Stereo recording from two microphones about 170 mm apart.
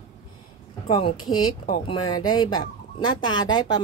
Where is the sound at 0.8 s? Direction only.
30° left (ahead or behind).